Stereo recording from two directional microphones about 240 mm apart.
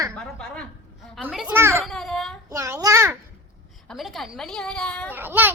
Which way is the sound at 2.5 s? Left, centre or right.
Centre.